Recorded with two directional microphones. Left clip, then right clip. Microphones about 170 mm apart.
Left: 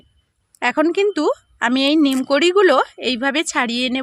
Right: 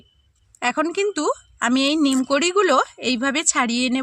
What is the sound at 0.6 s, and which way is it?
A woman's voice, 45° left (ahead or behind).